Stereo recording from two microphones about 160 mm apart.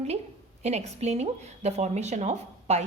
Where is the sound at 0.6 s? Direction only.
45° right (ahead or behind).